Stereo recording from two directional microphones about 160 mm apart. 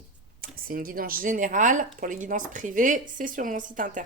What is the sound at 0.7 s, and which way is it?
Speech, 65° right (ahead or behind).